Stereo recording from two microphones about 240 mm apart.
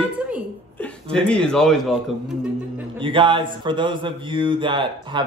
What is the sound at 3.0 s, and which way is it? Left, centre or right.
Speech, right.